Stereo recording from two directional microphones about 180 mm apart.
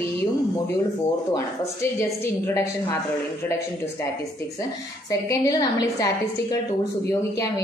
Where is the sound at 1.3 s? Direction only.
15° left (ahead or behind).